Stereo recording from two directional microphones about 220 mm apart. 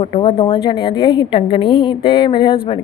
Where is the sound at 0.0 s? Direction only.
25° left (ahead or behind).